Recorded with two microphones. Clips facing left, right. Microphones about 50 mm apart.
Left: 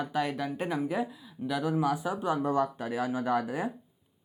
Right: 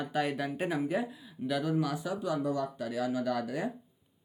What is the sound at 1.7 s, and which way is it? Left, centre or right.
Speech, centre.